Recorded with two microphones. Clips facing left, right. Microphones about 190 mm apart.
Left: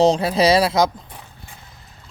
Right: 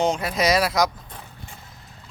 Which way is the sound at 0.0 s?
30° left (ahead or behind).